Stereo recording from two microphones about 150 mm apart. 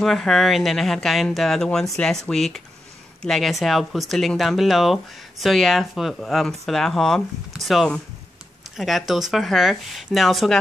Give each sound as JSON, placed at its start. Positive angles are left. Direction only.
{"t": 0.0, "sound": "speech", "side_deg": 0}